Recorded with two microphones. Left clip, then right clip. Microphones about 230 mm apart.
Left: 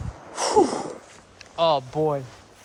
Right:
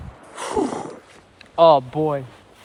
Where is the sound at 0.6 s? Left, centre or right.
Left.